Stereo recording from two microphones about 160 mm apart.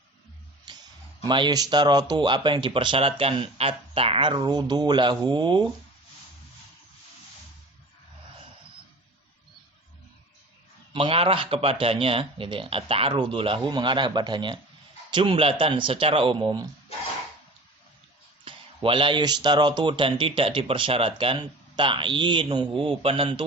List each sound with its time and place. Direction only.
0.7 s a sound: 25° right (ahead or behind)
1.2 s speech: 25° right (ahead or behind)
10.9 s speech: 35° right (ahead or behind)
18.4 s speech: 35° right (ahead or behind)